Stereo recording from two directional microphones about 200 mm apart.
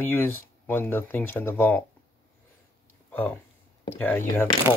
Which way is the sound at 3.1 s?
10° left (ahead or behind).